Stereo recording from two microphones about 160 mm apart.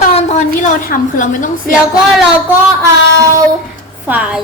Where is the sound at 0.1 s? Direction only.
50° left (ahead or behind).